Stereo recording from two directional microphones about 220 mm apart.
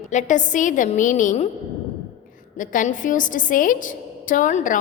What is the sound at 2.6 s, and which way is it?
A woman's voice, 35° left (ahead or behind).